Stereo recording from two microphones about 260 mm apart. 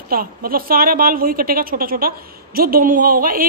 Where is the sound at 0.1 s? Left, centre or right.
Right.